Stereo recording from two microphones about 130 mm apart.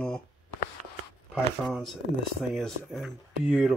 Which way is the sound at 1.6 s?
5° right (ahead or behind).